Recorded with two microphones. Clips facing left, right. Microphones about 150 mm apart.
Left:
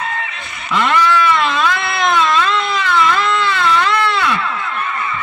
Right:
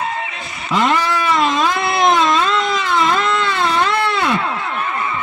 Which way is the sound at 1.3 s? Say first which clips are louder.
Even; 40° right (ahead or behind).